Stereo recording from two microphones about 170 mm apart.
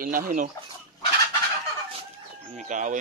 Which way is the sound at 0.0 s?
55° right (ahead or behind).